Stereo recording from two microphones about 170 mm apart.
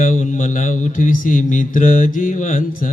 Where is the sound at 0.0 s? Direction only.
50° left (ahead or behind).